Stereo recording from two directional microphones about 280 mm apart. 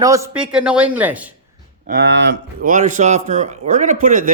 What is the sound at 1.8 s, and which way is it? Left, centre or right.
A man's voice, right.